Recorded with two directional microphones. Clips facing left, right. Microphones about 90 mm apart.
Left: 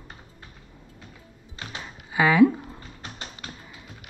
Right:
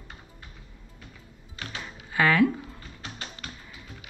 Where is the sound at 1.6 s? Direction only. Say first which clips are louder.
Even; 15° left (ahead or behind).